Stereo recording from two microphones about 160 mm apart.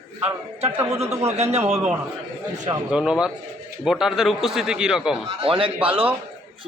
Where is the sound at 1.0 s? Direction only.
40° right (ahead or behind).